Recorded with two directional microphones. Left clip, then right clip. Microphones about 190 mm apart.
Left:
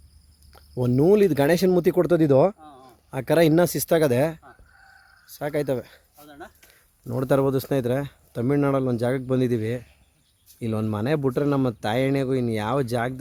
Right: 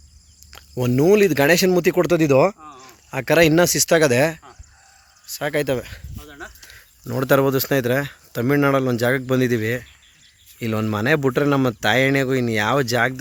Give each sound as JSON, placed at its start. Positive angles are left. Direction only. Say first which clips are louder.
{"t": 0.8, "sound": "speech", "louder": "right 3 dB", "side_deg": 10}
{"t": 6.2, "sound": "a sound", "louder": "right 5 dB", "side_deg": 65}
{"t": 7.1, "sound": "speech", "louder": "right 4 dB", "side_deg": 0}